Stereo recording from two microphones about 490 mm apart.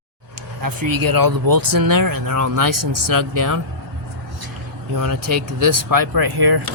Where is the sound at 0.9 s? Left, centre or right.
Right.